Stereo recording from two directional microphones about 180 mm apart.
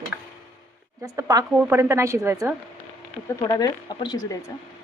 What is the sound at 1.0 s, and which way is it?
A woman's voice, 20° right (ahead or behind).